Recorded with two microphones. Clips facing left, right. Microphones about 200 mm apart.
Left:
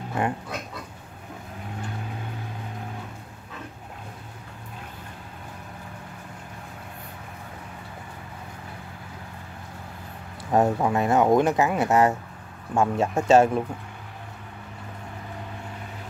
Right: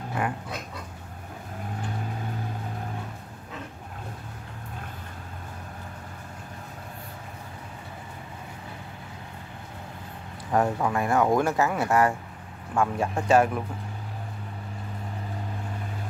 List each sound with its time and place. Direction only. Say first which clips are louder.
0.2 s pig: left 3 dB; 25° left (ahead or behind)
10.5 s speech: left 3 dB; 20° left (ahead or behind)